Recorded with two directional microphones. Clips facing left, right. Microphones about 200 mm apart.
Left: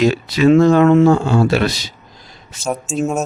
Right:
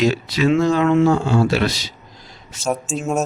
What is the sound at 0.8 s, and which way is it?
Speech, 40° left (ahead or behind).